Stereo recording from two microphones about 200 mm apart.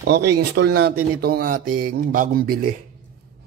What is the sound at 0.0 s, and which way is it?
Speech, 55° right (ahead or behind).